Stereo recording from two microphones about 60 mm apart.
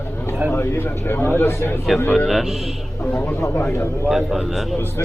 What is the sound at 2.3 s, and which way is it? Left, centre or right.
Speech, centre.